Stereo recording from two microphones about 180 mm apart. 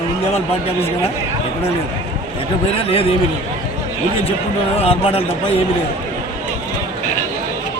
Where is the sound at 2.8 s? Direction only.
30° left (ahead or behind).